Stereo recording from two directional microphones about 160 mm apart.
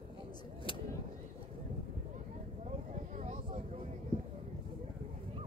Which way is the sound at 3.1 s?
45° right (ahead or behind).